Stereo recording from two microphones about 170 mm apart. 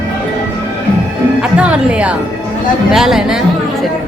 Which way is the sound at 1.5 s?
5° right (ahead or behind).